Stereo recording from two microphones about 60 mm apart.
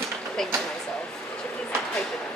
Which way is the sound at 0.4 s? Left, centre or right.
Centre.